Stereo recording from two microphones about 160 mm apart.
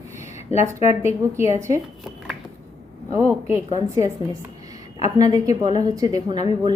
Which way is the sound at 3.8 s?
20° right (ahead or behind).